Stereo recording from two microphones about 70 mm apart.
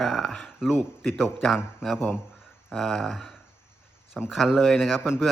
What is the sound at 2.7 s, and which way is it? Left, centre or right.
Speech, centre.